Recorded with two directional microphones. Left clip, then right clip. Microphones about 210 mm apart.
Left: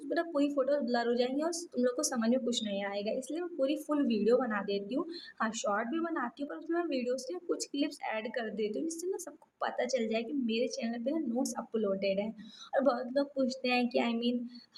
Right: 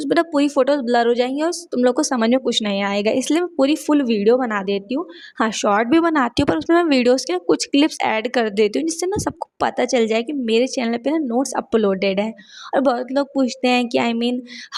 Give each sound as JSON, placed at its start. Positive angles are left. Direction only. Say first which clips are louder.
{"t": 0.0, "sound": "speech", "louder": "right 14 dB", "side_deg": -45}